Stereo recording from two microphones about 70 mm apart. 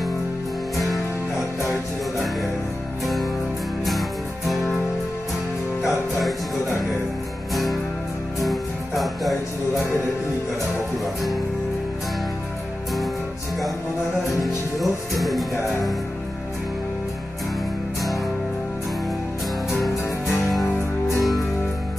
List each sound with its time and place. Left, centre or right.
0.7 s music: centre
4.5 s music: centre
5.8 s music: centre
14.4 s music: centre
19.7 s music: centre
20.6 s music: left